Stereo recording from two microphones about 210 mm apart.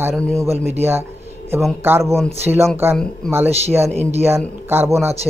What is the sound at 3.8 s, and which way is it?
Speech, 30° right (ahead or behind).